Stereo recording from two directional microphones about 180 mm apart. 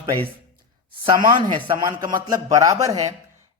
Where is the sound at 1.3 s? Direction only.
25° right (ahead or behind).